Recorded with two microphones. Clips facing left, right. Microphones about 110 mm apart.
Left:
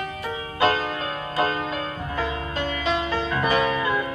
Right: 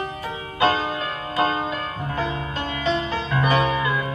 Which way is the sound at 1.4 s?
30° right (ahead or behind).